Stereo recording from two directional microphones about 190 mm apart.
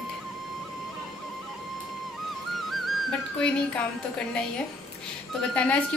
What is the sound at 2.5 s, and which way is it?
Music, centre (ahead or behind).